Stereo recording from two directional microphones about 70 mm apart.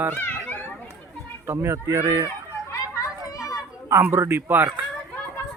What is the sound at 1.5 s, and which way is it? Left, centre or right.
Speech, right.